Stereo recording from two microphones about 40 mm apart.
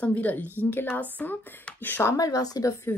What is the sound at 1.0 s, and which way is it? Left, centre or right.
Speech, left.